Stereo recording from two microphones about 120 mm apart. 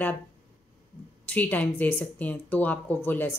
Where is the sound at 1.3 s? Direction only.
15° left (ahead or behind).